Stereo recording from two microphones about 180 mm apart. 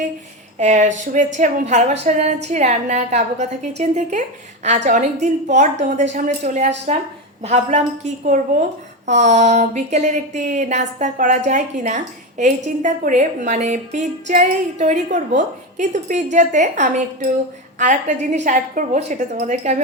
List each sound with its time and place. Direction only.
0.6 s a woman's voice: 40° right (ahead or behind)